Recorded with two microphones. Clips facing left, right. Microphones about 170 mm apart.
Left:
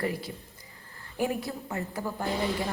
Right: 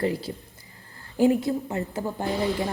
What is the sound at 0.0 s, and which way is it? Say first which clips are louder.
A woman's voice: right 5 dB; 25° right (ahead or behind).